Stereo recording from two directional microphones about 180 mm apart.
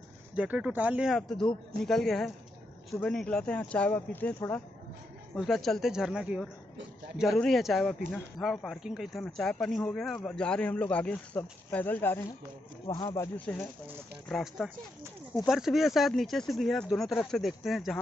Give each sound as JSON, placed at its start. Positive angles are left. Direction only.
{"t": 0.3, "sound": "speech", "side_deg": -5}
{"t": 14.3, "sound": "speech", "side_deg": 0}